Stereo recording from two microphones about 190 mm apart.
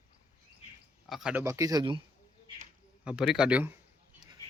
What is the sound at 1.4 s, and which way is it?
Speech, 15° right (ahead or behind).